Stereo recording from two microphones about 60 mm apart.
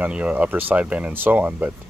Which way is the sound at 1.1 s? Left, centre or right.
Right.